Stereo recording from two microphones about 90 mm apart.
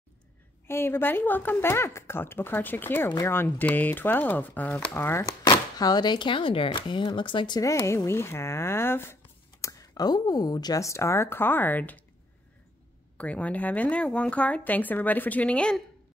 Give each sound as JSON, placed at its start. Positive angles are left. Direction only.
{"t": 0.7, "sound": "speech", "side_deg": 25}
{"t": 5.2, "sound": "speech", "side_deg": 45}
{"t": 7.6, "sound": "speech", "side_deg": 35}
{"t": 13.2, "sound": "speech", "side_deg": 15}